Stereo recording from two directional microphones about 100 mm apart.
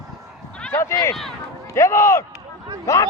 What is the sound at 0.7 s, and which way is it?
Speech, 25° left (ahead or behind).